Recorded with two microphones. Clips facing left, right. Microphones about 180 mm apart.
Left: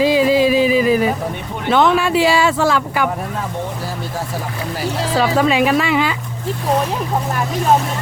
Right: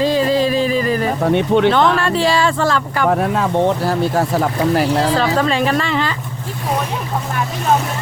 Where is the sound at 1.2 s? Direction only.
80° right.